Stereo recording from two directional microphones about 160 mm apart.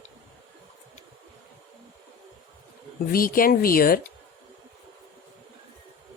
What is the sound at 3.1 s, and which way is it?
Speech, 65° left (ahead or behind).